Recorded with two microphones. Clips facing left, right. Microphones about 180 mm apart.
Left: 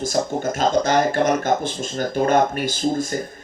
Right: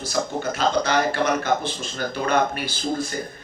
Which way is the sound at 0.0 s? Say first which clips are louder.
Left 4 dB; 45° left (ahead or behind).